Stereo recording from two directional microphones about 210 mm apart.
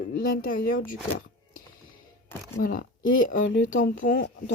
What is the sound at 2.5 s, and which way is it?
Speech, 40° left (ahead or behind).